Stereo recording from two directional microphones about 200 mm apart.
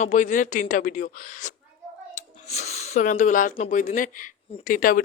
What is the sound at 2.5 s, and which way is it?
Speech, 35° left (ahead or behind).